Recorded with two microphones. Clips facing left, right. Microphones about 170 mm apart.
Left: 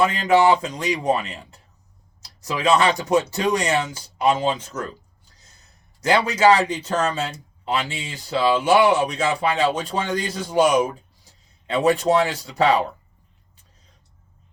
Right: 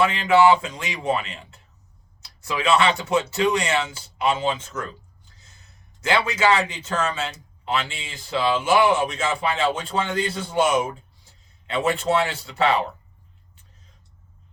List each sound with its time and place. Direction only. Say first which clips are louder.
0.0 s speech: even; 40° left (ahead or behind)
6.2 s speech: left 4 dB; 40° left (ahead or behind)